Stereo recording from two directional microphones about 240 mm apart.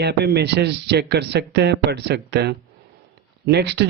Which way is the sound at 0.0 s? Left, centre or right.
Right.